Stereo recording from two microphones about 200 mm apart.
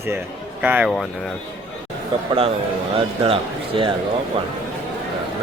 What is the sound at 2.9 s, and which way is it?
Speech, 30° right (ahead or behind).